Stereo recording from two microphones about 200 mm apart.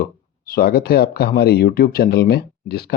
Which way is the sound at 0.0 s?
45° left (ahead or behind).